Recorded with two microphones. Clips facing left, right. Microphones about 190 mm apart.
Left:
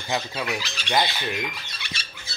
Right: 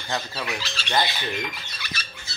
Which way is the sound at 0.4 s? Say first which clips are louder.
Left 2 dB; 15° left (ahead or behind).